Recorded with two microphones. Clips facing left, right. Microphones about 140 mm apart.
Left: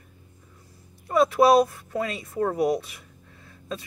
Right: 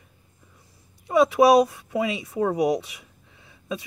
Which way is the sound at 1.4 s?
20° right (ahead or behind).